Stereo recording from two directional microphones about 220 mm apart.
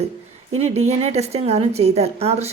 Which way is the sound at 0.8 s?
30° right (ahead or behind).